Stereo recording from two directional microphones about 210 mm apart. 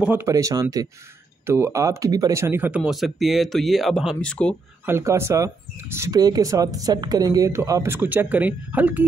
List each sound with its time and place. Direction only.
0.0 s speech: 10° right (ahead or behind)
4.8 s speech: 10° right (ahead or behind)